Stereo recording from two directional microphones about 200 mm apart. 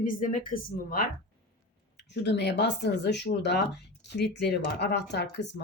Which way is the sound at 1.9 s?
60° left (ahead or behind).